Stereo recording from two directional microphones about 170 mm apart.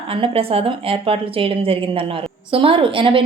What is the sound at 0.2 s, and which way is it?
A woman's voice, 35° right (ahead or behind).